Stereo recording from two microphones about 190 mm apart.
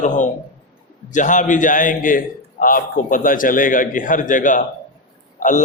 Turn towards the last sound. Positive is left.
turn(degrees=45)  # may be behind; listen again after turning